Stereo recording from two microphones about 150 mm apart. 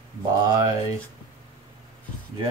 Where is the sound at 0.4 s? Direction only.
25° right (ahead or behind).